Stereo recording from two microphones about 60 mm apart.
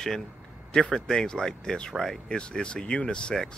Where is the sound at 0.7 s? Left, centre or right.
Centre.